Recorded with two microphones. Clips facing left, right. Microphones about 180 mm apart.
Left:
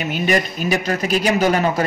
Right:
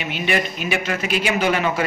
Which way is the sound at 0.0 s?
40° left (ahead or behind).